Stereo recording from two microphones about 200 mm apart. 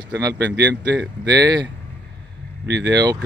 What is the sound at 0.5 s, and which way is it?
Speech, 60° right (ahead or behind).